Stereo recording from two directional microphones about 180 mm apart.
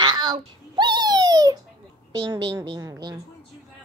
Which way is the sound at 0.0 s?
25° right (ahead or behind).